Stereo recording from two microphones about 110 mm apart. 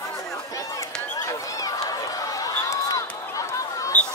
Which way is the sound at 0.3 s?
30° left (ahead or behind).